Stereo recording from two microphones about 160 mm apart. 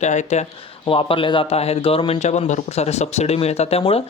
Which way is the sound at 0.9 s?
35° left (ahead or behind).